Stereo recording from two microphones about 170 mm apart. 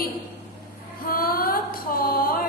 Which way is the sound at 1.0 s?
60° left (ahead or behind).